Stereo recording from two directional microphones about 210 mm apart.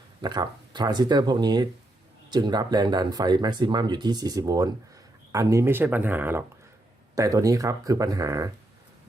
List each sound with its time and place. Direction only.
0.2 s speech: 20° right (ahead or behind)